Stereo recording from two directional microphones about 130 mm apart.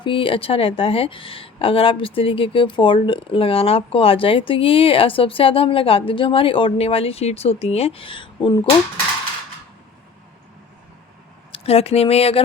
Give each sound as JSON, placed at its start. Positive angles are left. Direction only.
{"t": 0.0, "sound": "a woman's voice", "side_deg": 40}
{"t": 11.5, "sound": "a woman's voice", "side_deg": 50}